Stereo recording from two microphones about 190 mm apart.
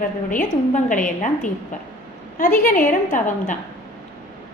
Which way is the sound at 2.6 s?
45° left (ahead or behind).